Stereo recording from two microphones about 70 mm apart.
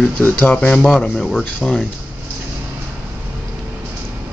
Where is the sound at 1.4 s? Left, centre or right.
Centre.